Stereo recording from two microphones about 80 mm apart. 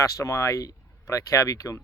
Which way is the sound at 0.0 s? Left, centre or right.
Left.